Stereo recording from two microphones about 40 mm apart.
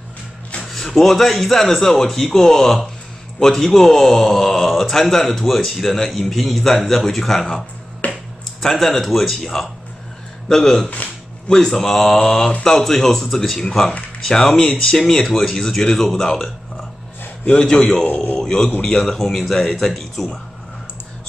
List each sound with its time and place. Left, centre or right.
0.6 s speech: centre
8.0 s a sound: left
8.5 s speech: centre
18.0 s a man's voice: left
18.4 s a man's voice: centre
19.1 s speech: centre